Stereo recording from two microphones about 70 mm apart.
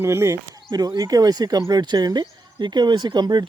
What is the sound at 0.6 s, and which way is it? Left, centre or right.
Speech, right.